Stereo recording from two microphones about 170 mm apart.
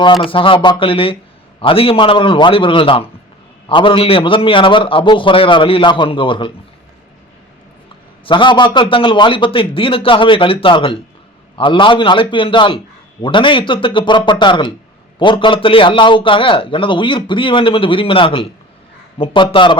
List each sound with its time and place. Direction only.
0.3 s a man's voice: 30° left (ahead or behind)
8.2 s a man's voice: 30° left (ahead or behind)